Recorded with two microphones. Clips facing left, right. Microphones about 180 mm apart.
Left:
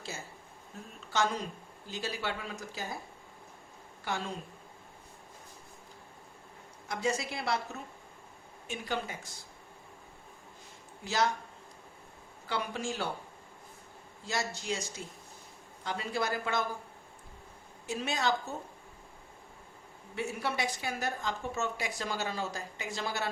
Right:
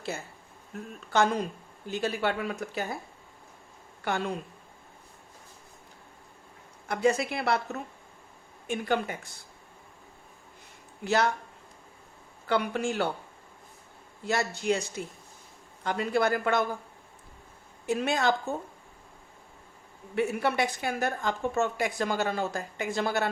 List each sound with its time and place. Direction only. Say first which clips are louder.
1.1 s a woman's voice: right 6 dB; 55° right (ahead or behind)
4.0 s a woman's voice: right 6 dB; 60° right (ahead or behind)
6.8 s a woman's voice: right 7 dB; 60° right (ahead or behind)
11.0 s a woman's voice: right 5 dB; 60° right (ahead or behind)
12.5 s a woman's voice: right 7 dB; 60° right (ahead or behind)
14.3 s a woman's voice: right 7 dB; 60° right (ahead or behind)
17.8 s a woman's voice: right 6 dB; 55° right (ahead or behind)
20.1 s a woman's voice: right 7 dB; 60° right (ahead or behind)